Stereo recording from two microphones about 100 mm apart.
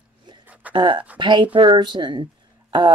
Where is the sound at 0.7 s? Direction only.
55° right (ahead or behind).